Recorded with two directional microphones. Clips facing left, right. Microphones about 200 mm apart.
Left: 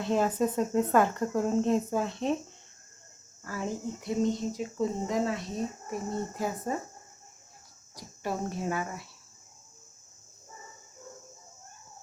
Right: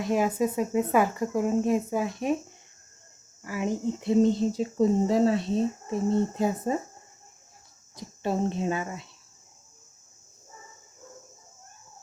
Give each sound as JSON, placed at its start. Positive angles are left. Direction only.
{"t": 0.0, "sound": "speech", "side_deg": -10}
{"t": 3.4, "sound": "speech", "side_deg": -15}
{"t": 4.2, "sound": "speech", "side_deg": -30}
{"t": 7.9, "sound": "speech", "side_deg": -25}